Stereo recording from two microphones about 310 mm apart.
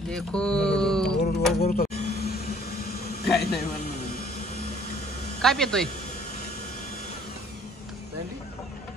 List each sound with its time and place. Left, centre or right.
0.1 s speech: centre
1.6 s music: left
3.3 s a man's voice: left
5.4 s speech: centre